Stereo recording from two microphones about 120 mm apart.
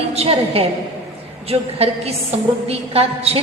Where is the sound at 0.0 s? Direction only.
55° right (ahead or behind).